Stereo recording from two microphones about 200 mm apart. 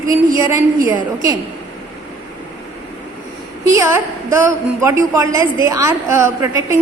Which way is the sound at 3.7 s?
15° right (ahead or behind).